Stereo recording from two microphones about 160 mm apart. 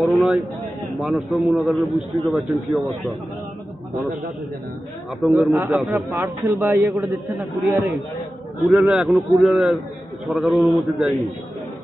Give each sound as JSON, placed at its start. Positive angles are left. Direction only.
{"t": 0.0, "sound": "a man's voice", "side_deg": 0}
{"t": 5.2, "sound": "a man's voice", "side_deg": 0}
{"t": 6.4, "sound": "a man's voice", "side_deg": -20}
{"t": 6.7, "sound": "a man's voice", "side_deg": -5}